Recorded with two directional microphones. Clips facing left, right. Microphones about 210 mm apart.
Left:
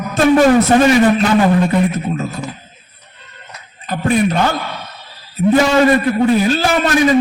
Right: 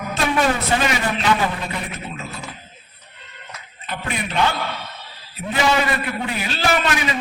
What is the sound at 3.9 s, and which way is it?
A man's voice, 45° left (ahead or behind).